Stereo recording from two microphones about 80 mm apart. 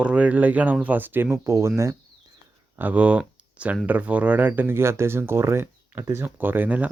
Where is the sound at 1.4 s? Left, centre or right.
Right.